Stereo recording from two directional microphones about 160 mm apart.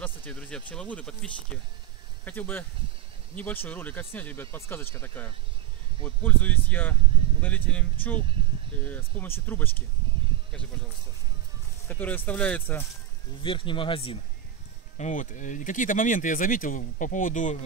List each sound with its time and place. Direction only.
0.0 s speech: 10° left (ahead or behind)
11.9 s speech: 10° left (ahead or behind)
13.4 s speech: 30° left (ahead or behind)
15.0 s speech: 50° left (ahead or behind)